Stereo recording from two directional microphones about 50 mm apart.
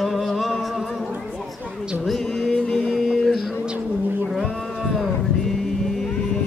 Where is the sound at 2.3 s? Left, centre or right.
Centre.